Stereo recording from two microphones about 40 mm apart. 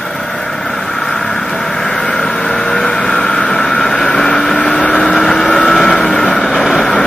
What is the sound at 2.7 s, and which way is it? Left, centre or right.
Vehicle, centre.